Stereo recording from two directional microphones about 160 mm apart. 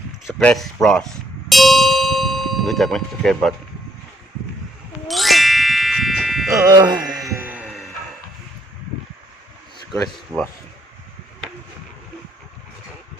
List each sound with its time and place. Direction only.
0.3 s speech: centre (ahead or behind)
1.5 s tubular bells: centre (ahead or behind)
5.0 s ding: centre (ahead or behind)
6.7 s a sound: 25° right (ahead or behind); by 7.9 s 5° right (ahead or behind)
10.3 s speech: 20° right (ahead or behind)